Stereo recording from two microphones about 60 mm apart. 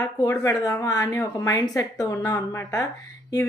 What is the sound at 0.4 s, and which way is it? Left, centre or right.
A woman's voice, left.